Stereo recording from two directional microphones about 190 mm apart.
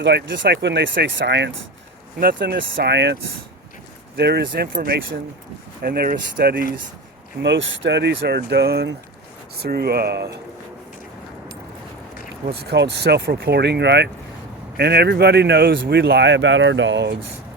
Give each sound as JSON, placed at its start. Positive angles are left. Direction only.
{"t": 0.0, "sound": "speech", "side_deg": -60}
{"t": 2.2, "sound": "speech", "side_deg": -55}
{"t": 4.2, "sound": "speech", "side_deg": -60}
{"t": 7.4, "sound": "speech", "side_deg": -80}
{"t": 12.5, "sound": "speech", "side_deg": -65}